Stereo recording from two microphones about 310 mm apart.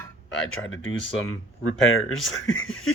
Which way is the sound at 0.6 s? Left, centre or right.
Left.